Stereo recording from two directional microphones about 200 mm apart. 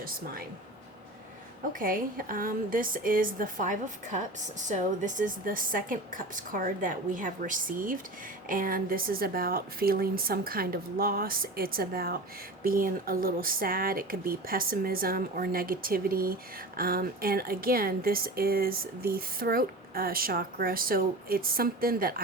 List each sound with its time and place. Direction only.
1.8 s a woman's voice: 45° right (ahead or behind)